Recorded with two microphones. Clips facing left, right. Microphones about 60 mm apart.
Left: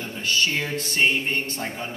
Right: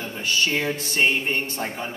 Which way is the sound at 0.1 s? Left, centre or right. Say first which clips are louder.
Left 1 dB; centre.